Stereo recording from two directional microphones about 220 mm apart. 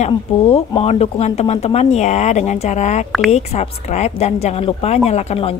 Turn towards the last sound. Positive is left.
turn(degrees=30)  # may be behind; listen again after turning